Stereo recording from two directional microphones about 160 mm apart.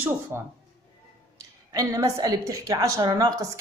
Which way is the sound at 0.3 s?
15° right (ahead or behind).